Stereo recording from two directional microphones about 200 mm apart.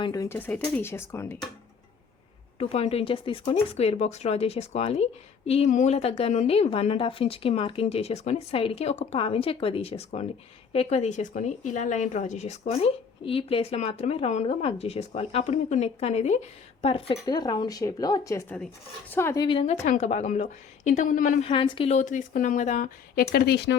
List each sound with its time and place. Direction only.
0.0 s speech: 15° left (ahead or behind)
2.6 s speech: 30° left (ahead or behind)
21.4 s speech: 25° left (ahead or behind)
23.3 s speech: 50° left (ahead or behind)